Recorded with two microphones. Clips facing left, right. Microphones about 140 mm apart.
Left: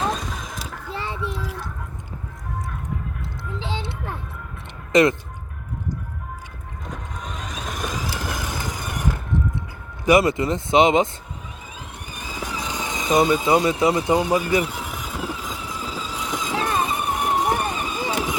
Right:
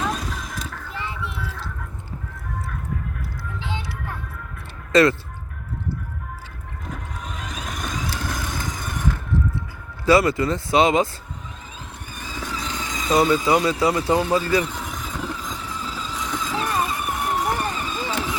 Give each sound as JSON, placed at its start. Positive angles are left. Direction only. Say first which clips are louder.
{"t": 0.1, "sound": "vehicle", "louder": "even", "side_deg": 0}
{"t": 0.9, "sound": "a sound", "louder": "left 2 dB", "side_deg": 30}
{"t": 1.5, "sound": "a sound", "louder": "left 2 dB", "side_deg": 15}
{"t": 3.6, "sound": "music", "louder": "left 2 dB", "side_deg": 25}
{"t": 4.9, "sound": "speech", "louder": "even", "side_deg": 20}
{"t": 7.3, "sound": "vehicle", "louder": "left 1 dB", "side_deg": 0}
{"t": 10.1, "sound": "speech", "louder": "even", "side_deg": 20}
{"t": 12.1, "sound": "vehicle", "louder": "left 1 dB", "side_deg": 15}